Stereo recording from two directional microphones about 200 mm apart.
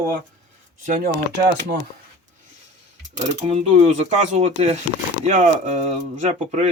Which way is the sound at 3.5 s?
30° right (ahead or behind).